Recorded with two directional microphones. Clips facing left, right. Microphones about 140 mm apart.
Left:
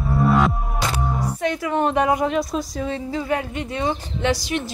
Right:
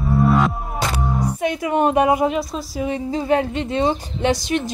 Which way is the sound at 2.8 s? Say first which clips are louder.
Right 3 dB; 20° right (ahead or behind).